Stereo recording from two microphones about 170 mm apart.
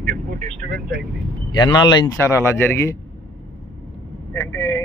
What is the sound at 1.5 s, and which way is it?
Speech, 25° left (ahead or behind).